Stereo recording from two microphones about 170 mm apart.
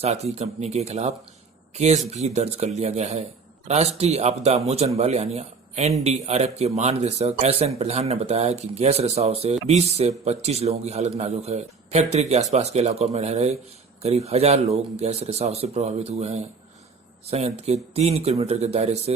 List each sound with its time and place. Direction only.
0.0 s a man's voice: 40° right (ahead or behind)